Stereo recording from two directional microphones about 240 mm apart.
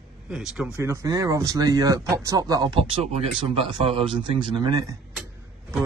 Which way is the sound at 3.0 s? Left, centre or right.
Right.